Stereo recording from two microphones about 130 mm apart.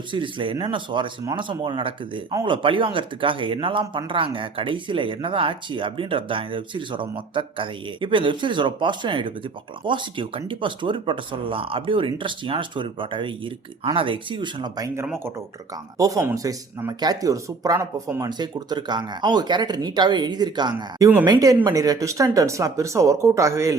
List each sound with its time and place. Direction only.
0.1 s speech: 40° right (ahead or behind)
15.0 s speech: 20° right (ahead or behind)